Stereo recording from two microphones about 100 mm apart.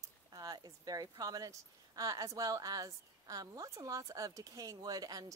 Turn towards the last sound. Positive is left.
turn(degrees=-40)  # may be behind; listen again after turning